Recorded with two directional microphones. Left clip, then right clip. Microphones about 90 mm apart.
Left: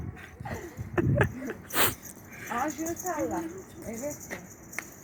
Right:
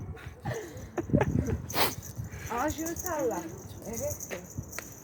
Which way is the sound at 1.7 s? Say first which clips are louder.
Left 2 dB; 25° right (ahead or behind).